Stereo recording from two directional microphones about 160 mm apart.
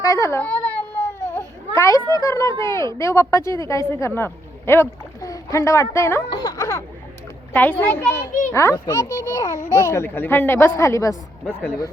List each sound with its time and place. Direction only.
0.0 s baby cry: 20° left (ahead or behind)
2.1 s a woman's voice: 20° left (ahead or behind)
6.3 s a sound: 25° left (ahead or behind)
7.5 s speech: 10° left (ahead or behind)